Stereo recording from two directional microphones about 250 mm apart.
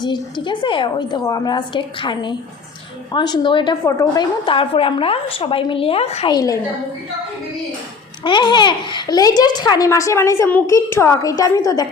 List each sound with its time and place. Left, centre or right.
0.0 s a child's voice: centre
8.2 s a child's voice: centre